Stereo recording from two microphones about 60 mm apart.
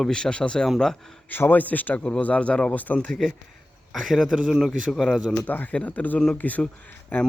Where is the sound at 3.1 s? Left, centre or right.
Centre.